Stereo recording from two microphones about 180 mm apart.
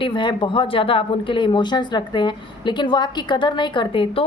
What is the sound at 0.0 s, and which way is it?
A woman's voice, 25° left (ahead or behind).